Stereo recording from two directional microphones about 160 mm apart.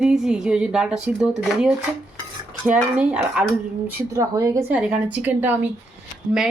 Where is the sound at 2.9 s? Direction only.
5° right (ahead or behind).